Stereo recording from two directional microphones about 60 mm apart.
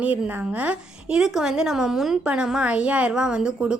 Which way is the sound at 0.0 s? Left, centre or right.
Right.